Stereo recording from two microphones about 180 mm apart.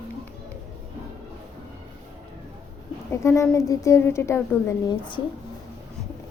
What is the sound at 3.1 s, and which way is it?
A woman's voice, 15° left (ahead or behind).